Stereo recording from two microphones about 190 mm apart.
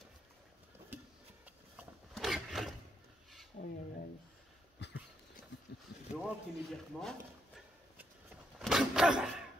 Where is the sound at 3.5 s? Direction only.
50° left (ahead or behind).